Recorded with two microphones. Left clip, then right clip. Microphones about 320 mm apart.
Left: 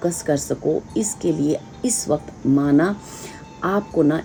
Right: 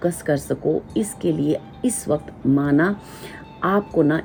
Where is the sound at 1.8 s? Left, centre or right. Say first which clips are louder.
Left 1 dB; centre.